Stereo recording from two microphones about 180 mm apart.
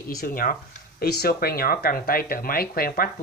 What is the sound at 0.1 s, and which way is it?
Speech, 55° left (ahead or behind).